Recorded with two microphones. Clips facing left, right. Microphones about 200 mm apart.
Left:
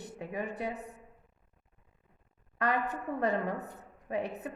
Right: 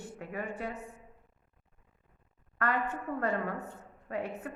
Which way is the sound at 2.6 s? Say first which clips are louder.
Left 1 dB; 15° left (ahead or behind).